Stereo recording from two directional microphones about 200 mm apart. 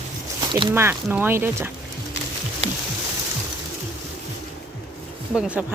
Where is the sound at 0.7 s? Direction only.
10° right (ahead or behind).